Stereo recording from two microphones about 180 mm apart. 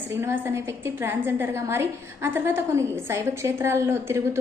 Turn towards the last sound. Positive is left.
turn(degrees=-15)  # may be behind; listen again after turning